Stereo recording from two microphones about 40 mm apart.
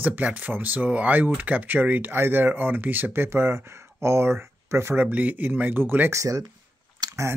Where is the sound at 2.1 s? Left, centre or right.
Right.